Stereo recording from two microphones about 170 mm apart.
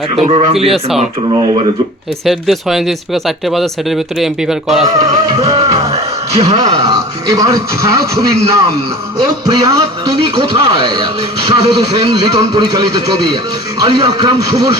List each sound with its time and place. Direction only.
0.2 s speech: 35° right (ahead or behind)
0.7 s speech: centre (ahead or behind)
1.3 s speech: 25° right (ahead or behind)
2.2 s speech: centre (ahead or behind)
4.9 s music: 20° right (ahead or behind)
5.5 s music: 35° right (ahead or behind)
6.4 s speech: 20° right (ahead or behind)